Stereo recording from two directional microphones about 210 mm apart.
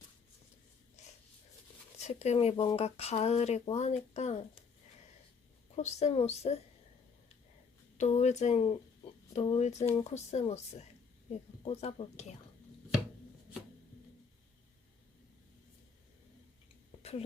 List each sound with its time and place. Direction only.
2.0 s speech: 30° left (ahead or behind)
5.7 s speech: 30° left (ahead or behind)
7.9 s speech: 35° left (ahead or behind)
17.0 s a sound: 30° left (ahead or behind)